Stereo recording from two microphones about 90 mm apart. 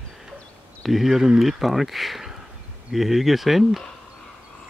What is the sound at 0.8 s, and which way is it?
Speech, centre (ahead or behind).